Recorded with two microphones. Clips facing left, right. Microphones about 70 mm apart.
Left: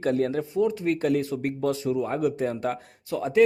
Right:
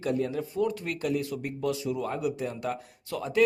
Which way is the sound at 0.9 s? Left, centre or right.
Left.